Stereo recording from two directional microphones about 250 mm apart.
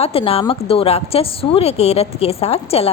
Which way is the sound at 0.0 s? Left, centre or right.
Left.